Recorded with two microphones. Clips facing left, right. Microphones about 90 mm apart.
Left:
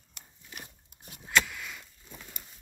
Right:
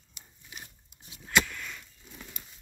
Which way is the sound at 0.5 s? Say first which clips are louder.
Left 1 dB; 10° right (ahead or behind).